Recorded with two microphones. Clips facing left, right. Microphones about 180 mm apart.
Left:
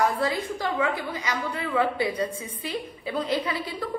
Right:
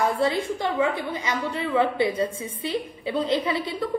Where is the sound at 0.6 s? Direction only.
25° right (ahead or behind).